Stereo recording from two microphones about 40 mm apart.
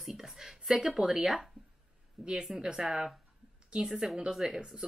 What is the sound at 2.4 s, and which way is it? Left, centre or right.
Speech, centre.